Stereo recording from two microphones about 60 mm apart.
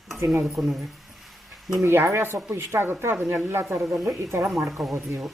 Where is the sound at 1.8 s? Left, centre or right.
Right.